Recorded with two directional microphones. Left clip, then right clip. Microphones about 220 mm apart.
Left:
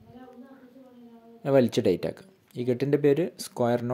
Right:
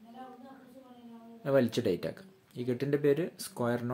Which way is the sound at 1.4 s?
35° left (ahead or behind).